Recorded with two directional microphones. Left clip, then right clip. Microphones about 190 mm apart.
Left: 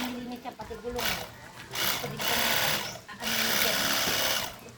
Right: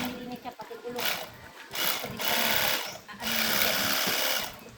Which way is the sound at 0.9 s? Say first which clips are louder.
Even; 10° right (ahead or behind).